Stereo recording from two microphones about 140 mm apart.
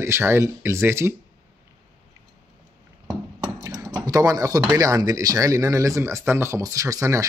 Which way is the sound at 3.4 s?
20° right (ahead or behind).